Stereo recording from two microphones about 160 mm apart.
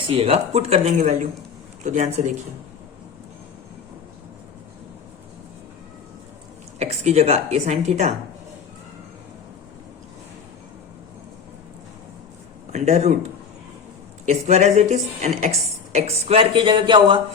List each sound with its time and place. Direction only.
0.1 s a woman's voice: 40° right (ahead or behind)
6.7 s a woman's voice: 45° right (ahead or behind)
12.7 s a woman's voice: 45° right (ahead or behind)
14.3 s speech: 45° right (ahead or behind); by 17.2 s 30° right (ahead or behind)